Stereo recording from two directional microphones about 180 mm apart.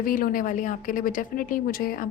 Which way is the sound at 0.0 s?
50° left (ahead or behind).